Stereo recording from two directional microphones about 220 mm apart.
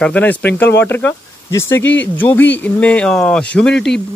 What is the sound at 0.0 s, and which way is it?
Speech, 5° left (ahead or behind).